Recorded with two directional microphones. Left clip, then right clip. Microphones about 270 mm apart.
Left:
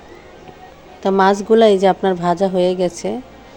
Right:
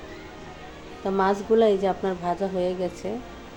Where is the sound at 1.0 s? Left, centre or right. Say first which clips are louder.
Left 9 dB; left.